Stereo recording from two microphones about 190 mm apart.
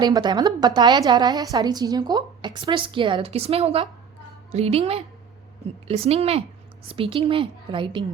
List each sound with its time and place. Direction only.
0.0 s a woman's voice: 20° right (ahead or behind)